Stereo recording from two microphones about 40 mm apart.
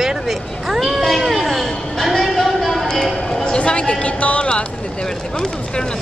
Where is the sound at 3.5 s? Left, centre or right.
Left.